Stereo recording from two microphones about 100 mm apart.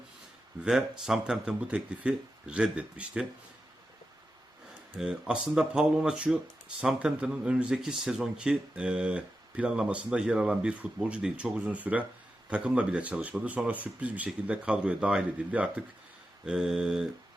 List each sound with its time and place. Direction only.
0.6 s speech: 5° right (ahead or behind)
4.9 s speech: 10° right (ahead or behind)